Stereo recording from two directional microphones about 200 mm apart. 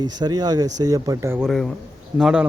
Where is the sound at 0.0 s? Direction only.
20° right (ahead or behind).